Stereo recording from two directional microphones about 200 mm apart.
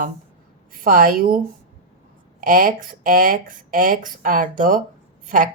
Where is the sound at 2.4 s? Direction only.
45° right (ahead or behind).